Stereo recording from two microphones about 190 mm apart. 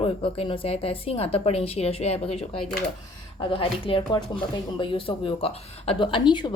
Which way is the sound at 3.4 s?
25° left (ahead or behind).